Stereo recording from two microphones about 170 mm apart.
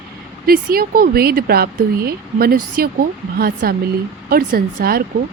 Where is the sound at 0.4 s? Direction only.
60° right (ahead or behind).